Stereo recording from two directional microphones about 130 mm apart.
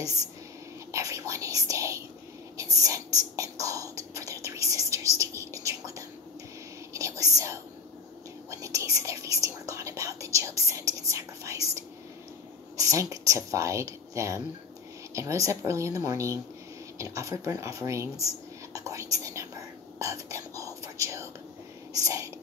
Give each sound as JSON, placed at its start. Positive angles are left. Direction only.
{"t": 0.9, "sound": "speech", "side_deg": -25}
{"t": 18.2, "sound": "whispering", "side_deg": -25}
{"t": 21.9, "sound": "speech", "side_deg": -25}